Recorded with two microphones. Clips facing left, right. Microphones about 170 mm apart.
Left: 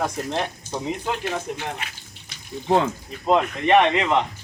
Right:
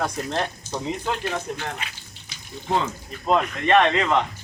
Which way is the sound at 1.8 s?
55° left (ahead or behind).